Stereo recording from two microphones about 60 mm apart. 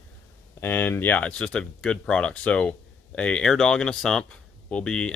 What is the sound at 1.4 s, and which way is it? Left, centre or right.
Speech, centre.